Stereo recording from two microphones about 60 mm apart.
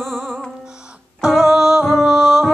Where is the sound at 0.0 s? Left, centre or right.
Centre.